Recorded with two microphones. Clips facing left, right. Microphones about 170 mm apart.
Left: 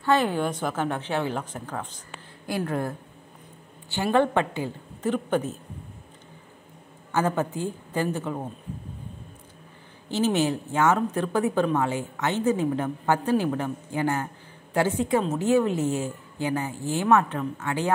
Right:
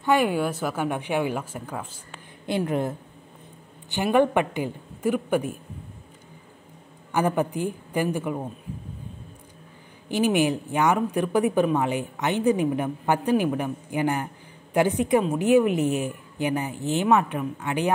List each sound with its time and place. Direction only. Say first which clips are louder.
0.0 s speech: right 1 dB; 10° right (ahead or behind)
2.4 s a woman's voice: right 3 dB; 20° right (ahead or behind)
7.1 s speech: right 2 dB; 15° right (ahead or behind)
10.0 s speech: right 2 dB; 15° right (ahead or behind)